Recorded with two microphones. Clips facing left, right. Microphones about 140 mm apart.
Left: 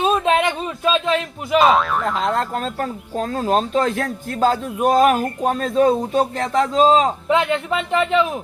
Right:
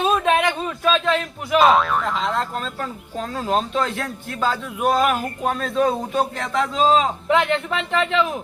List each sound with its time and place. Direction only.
0.1 s speech: 20° left (ahead or behind)
1.5 s speech: centre (ahead or behind)
2.3 s speech: 45° left (ahead or behind)
7.3 s a man's voice: 15° left (ahead or behind)